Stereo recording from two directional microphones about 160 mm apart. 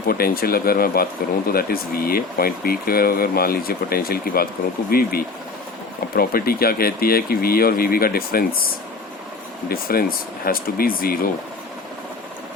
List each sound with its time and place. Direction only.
0.1 s speech: 70° left (ahead or behind)